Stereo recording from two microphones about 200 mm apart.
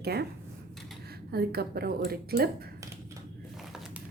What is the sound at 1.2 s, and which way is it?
A woman's voice, 50° right (ahead or behind).